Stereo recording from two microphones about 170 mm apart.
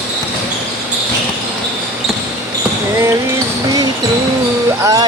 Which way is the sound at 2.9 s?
15° right (ahead or behind).